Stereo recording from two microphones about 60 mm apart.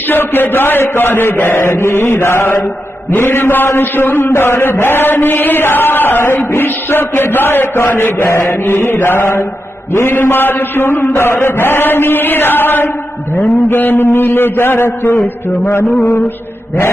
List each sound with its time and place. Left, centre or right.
0.1 s a man's voice: left
9.2 s mantra: left
9.9 s a man's voice: left